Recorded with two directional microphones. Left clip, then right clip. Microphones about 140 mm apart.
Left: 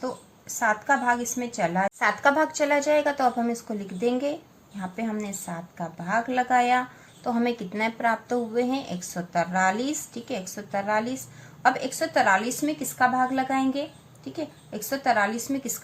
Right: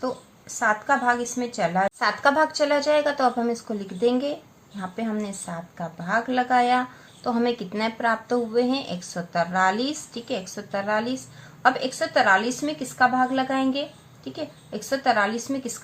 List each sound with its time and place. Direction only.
0.0 s a woman's voice: 40° right (ahead or behind)
14.7 s a woman's voice: 35° right (ahead or behind)